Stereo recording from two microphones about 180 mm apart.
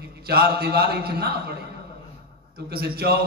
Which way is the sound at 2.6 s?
60° right (ahead or behind).